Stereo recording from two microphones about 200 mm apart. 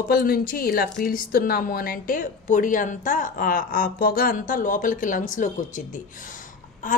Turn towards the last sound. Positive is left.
turn(degrees=40)  # may be behind; listen again after turning